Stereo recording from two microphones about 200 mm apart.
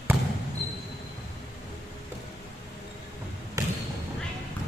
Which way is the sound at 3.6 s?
15° right (ahead or behind).